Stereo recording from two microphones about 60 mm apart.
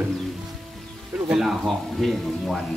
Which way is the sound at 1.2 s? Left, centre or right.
Centre.